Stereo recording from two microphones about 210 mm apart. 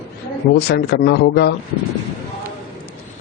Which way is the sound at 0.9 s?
55° left (ahead or behind).